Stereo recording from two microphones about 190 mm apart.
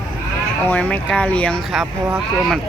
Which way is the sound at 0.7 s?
10° left (ahead or behind).